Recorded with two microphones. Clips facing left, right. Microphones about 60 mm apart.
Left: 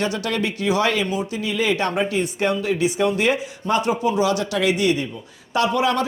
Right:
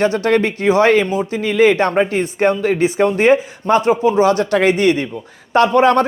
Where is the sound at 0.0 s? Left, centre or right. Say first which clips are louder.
Right 8 dB; right.